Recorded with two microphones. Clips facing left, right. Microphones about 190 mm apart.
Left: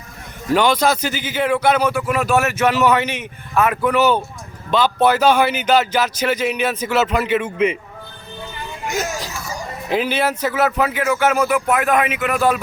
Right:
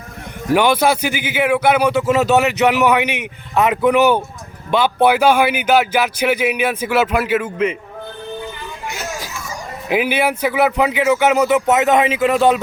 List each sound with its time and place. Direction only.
0.5 s speech: 10° right (ahead or behind)
1.9 s speech: 25° right (ahead or behind); by 7.7 s 5° right (ahead or behind)
9.9 s speech: 10° right (ahead or behind)